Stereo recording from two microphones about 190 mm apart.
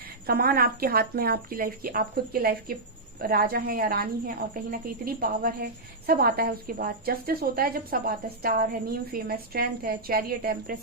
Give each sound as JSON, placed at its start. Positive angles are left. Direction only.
{"t": 0.3, "sound": "a woman's voice", "side_deg": -50}